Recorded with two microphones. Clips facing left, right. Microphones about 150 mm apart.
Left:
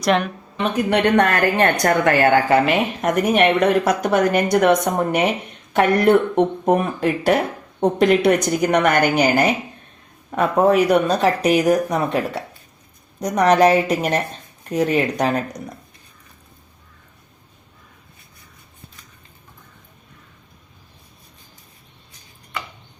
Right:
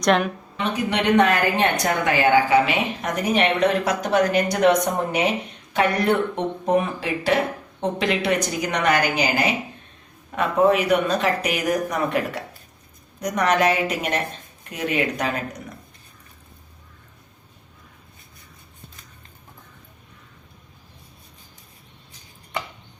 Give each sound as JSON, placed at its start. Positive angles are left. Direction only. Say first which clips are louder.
{"t": 0.0, "sound": "speech", "louder": "left 1 dB", "side_deg": 0}
{"t": 0.6, "sound": "a woman's voice", "louder": "left 5 dB", "side_deg": 55}